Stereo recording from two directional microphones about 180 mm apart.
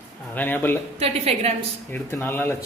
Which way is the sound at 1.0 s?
35° right (ahead or behind).